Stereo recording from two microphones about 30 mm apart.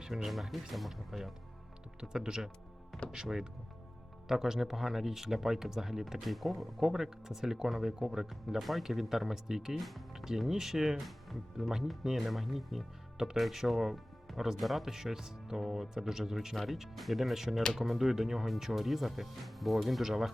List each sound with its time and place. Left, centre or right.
0.1 s speech: centre
2.0 s speech: right
2.9 s speech: centre
4.3 s speech: centre
6.2 s speech: centre
6.8 s speech: centre
9.7 s speech: centre
11.0 s speech: centre